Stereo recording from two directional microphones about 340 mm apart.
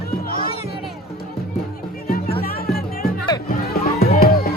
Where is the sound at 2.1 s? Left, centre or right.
Left.